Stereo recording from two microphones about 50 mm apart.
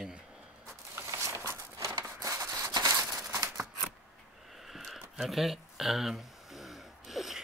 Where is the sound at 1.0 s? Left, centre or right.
Right.